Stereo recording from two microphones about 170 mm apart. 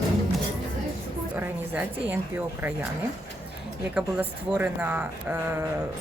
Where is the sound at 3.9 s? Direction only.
10° right (ahead or behind).